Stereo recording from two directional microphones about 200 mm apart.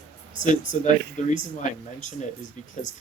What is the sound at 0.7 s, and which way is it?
Speech, 35° left (ahead or behind).